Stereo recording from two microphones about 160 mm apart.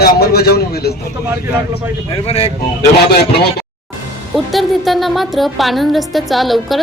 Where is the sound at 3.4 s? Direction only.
80° left.